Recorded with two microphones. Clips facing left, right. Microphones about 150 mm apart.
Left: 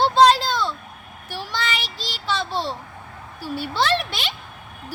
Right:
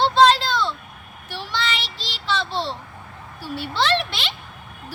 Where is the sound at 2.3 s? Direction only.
10° left (ahead or behind).